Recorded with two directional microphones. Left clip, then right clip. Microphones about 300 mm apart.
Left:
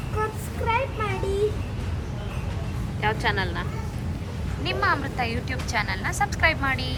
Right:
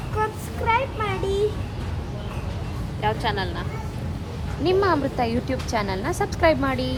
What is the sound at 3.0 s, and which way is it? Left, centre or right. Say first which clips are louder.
Speech: even; centre.